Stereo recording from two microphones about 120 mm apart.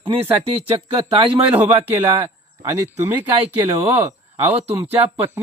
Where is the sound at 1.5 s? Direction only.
15° right (ahead or behind).